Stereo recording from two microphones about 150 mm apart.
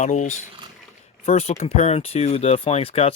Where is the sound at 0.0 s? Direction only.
50° left (ahead or behind).